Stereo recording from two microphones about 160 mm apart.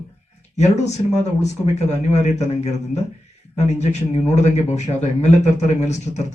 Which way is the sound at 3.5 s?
45° left (ahead or behind).